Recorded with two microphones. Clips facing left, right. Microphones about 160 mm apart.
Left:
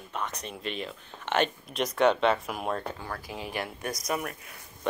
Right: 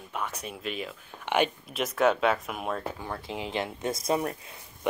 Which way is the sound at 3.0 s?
20° right (ahead or behind).